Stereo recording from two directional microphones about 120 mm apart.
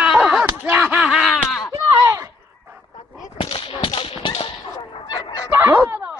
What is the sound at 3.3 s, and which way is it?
Whip, 50° left (ahead or behind).